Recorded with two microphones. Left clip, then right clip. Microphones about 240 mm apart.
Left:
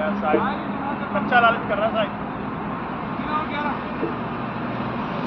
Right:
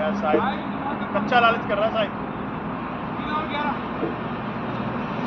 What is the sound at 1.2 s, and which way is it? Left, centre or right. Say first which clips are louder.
Speech: left 1 dB; right.